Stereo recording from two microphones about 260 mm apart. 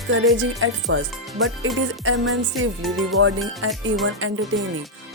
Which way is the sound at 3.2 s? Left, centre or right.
Right.